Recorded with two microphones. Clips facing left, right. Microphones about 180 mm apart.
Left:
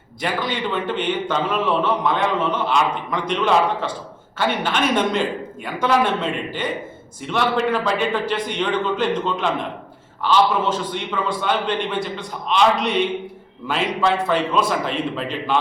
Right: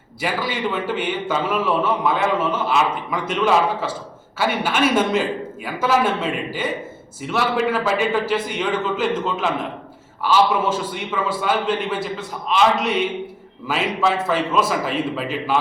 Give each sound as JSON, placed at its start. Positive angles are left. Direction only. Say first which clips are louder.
{"t": 0.2, "sound": "a man's voice", "louder": "even", "side_deg": -5}